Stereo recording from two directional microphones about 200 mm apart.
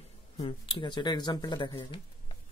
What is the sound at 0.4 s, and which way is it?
Speech, 25° left (ahead or behind).